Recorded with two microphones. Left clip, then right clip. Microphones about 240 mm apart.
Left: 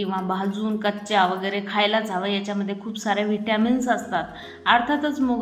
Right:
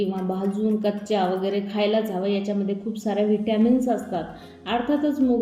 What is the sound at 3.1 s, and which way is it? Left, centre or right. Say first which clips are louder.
Speech: right 1 dB; left.